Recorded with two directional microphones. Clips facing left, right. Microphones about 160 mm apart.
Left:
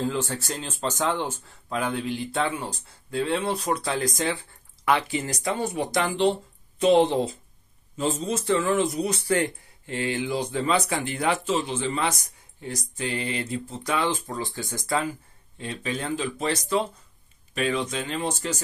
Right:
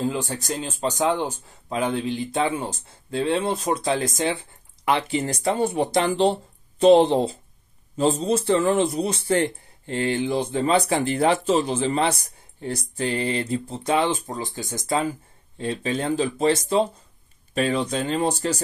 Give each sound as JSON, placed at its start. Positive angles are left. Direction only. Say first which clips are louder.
{"t": 0.0, "sound": "speech", "louder": "right 1 dB", "side_deg": -15}
{"t": 15.5, "sound": "speech", "louder": "right 5 dB", "side_deg": -35}